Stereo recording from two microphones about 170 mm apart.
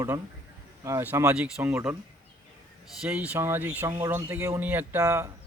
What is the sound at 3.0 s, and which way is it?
Speech, 5° right (ahead or behind).